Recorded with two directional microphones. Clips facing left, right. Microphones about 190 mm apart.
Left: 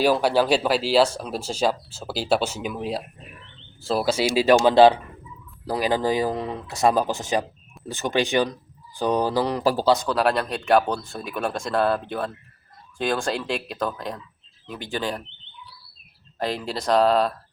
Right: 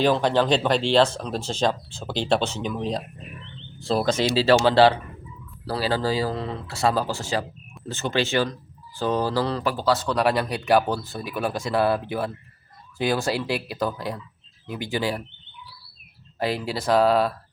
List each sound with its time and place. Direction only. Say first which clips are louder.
0.0 s speech: left 1 dB; 10° left (ahead or behind)
10.1 s speech: even; centre (ahead or behind)
16.4 s speech: right 1 dB; 5° right (ahead or behind)